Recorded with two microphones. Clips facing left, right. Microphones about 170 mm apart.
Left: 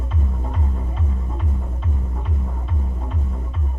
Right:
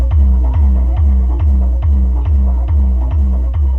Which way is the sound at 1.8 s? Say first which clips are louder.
Right 6 dB; 70° right (ahead or behind).